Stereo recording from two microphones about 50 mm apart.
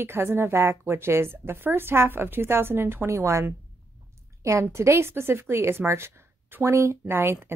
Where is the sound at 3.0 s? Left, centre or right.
Right.